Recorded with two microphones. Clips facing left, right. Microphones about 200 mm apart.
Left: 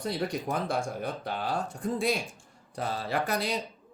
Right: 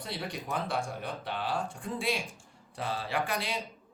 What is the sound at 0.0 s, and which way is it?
Speech, 45° left (ahead or behind).